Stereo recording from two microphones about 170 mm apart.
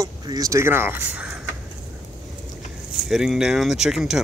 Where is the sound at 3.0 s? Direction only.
Centre (ahead or behind).